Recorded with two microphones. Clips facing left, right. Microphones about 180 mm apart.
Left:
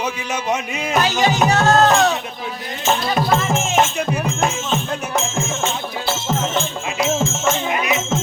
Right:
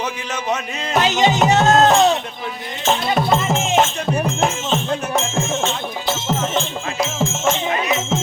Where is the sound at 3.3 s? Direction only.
Centre (ahead or behind).